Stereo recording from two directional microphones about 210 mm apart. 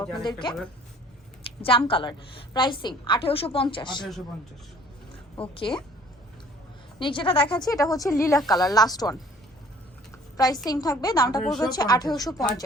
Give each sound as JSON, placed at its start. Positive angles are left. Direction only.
{"t": 0.2, "sound": "a woman's voice", "side_deg": 20}
{"t": 5.4, "sound": "a woman's voice", "side_deg": 25}
{"t": 7.0, "sound": "a woman's voice", "side_deg": 25}
{"t": 10.3, "sound": "a woman's voice", "side_deg": 20}
{"t": 11.4, "sound": "a woman's voice", "side_deg": 0}
{"t": 11.7, "sound": "a woman's voice", "side_deg": 20}